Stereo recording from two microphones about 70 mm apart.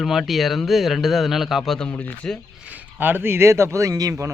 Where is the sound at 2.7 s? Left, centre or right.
Right.